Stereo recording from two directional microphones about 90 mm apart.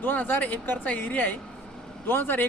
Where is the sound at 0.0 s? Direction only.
20° left (ahead or behind).